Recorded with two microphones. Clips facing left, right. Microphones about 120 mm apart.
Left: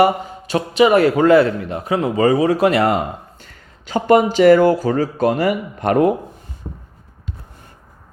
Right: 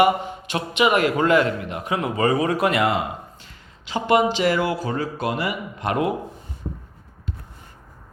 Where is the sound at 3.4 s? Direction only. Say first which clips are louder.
Left 3 dB; 45° left (ahead or behind).